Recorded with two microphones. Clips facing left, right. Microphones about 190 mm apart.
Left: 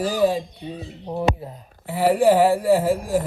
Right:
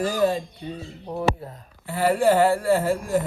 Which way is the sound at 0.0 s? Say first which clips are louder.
Left 2 dB; centre (ahead or behind).